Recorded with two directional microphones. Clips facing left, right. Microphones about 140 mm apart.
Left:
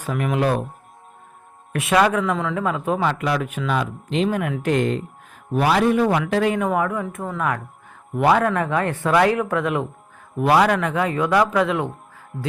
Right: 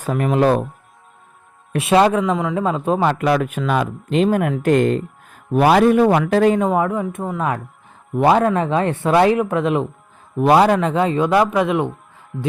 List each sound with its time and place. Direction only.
0.0 s speech: 40° right (ahead or behind)
1.7 s speech: 30° right (ahead or behind)
3.1 s speech: 50° right (ahead or behind)
6.6 s speech: 25° right (ahead or behind)